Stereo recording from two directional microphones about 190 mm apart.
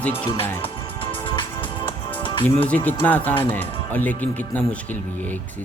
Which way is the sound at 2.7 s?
10° left (ahead or behind).